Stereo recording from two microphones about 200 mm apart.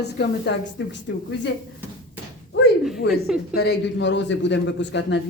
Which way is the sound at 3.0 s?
55° left (ahead or behind).